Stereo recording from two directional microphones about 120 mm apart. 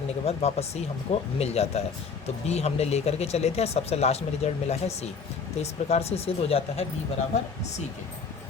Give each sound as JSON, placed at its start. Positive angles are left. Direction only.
{"t": 0.3, "sound": "speech", "side_deg": 60}